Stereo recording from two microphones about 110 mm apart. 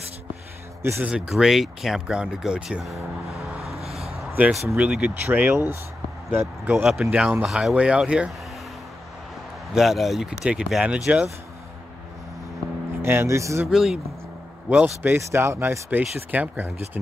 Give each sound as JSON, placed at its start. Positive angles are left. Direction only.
{"t": 1.0, "sound": "speech", "side_deg": -10}
{"t": 3.6, "sound": "vehicle", "side_deg": 0}
{"t": 4.4, "sound": "speech", "side_deg": -15}
{"t": 6.9, "sound": "speech", "side_deg": -5}
{"t": 9.8, "sound": "speech", "side_deg": 0}
{"t": 13.0, "sound": "speech", "side_deg": -20}
{"t": 13.7, "sound": "speech", "side_deg": -5}
{"t": 14.7, "sound": "speech", "side_deg": -15}